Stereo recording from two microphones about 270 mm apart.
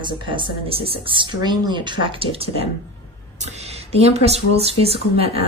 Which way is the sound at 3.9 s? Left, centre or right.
Right.